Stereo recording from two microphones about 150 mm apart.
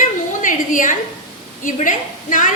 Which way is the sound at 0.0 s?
60° left (ahead or behind).